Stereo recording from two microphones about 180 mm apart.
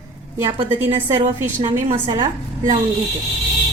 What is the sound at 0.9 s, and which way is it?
A woman's voice, 30° right (ahead or behind).